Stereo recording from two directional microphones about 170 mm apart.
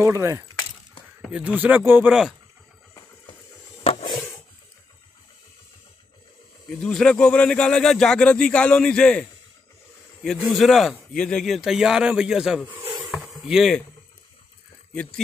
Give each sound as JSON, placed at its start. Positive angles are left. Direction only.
{"t": 0.0, "sound": "speech", "side_deg": -15}
{"t": 1.2, "sound": "speech", "side_deg": -5}
{"t": 3.8, "sound": "a sound", "side_deg": 35}
{"t": 6.7, "sound": "speech", "side_deg": 5}
{"t": 13.1, "sound": "a sound", "side_deg": 0}
{"t": 15.0, "sound": "speech", "side_deg": 5}